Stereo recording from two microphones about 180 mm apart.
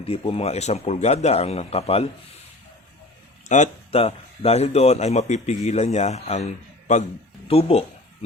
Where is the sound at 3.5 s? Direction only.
35° left (ahead or behind).